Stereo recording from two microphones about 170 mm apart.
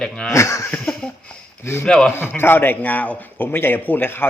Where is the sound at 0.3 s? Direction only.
20° left (ahead or behind).